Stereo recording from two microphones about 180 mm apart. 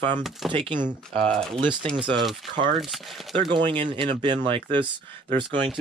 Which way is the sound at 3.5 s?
25° right (ahead or behind).